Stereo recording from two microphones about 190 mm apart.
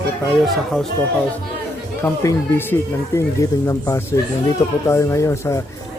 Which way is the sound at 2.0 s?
15° left (ahead or behind).